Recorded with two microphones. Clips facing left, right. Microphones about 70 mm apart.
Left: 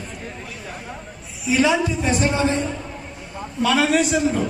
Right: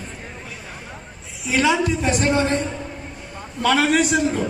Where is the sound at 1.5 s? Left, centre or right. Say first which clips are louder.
Even; right.